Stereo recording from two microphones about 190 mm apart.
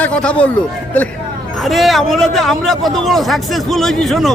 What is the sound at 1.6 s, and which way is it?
Speech, centre (ahead or behind).